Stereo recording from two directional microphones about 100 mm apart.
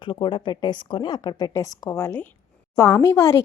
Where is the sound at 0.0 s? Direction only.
55° left (ahead or behind).